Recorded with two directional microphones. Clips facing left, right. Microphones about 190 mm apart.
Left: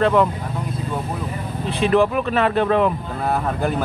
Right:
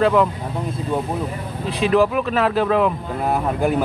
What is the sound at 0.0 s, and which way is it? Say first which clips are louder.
Speech: even; centre (ahead or behind).